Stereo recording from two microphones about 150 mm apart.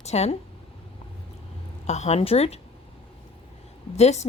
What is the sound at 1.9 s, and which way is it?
Speech, 50° left (ahead or behind).